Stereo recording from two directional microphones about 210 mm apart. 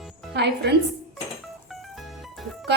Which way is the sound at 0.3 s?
55° right (ahead or behind).